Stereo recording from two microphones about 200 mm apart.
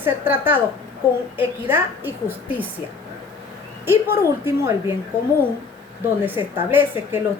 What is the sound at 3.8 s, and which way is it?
A woman's voice, 10° right (ahead or behind).